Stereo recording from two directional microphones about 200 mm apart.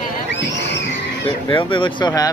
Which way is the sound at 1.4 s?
25° left (ahead or behind).